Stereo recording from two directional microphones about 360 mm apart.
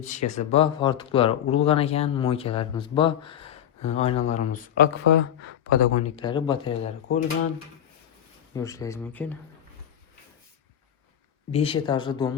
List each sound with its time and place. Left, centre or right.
0.0 s speech: centre
5.4 s speech: left
5.8 s speech: centre
8.5 s speech: centre
11.5 s speech: centre